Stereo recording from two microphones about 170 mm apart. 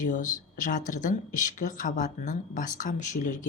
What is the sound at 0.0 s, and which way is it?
Speech, 50° left (ahead or behind).